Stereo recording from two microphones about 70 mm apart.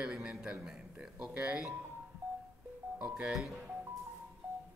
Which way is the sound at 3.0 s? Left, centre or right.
Centre.